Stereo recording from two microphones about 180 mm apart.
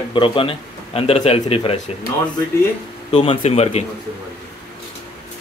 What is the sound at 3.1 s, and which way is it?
Speech, 35° left (ahead or behind).